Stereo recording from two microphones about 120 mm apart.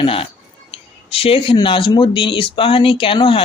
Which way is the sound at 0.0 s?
50° left (ahead or behind).